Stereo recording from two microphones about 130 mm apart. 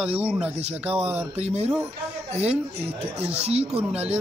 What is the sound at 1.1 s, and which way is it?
Speech, 55° right (ahead or behind).